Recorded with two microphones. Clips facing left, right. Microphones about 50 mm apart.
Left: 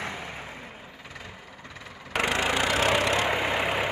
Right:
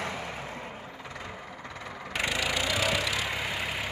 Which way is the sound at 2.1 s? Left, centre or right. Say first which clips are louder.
Left 4 dB; left.